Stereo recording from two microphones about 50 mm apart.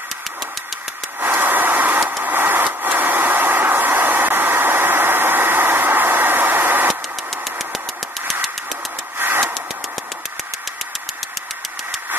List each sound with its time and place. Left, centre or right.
1.2 s vehicle: right
2.2 s a sound: right
9.2 s vehicle: right